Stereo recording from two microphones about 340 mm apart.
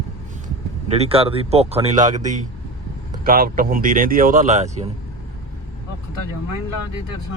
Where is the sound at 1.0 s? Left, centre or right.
Centre.